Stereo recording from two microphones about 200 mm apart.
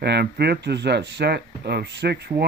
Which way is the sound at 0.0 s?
55° right (ahead or behind).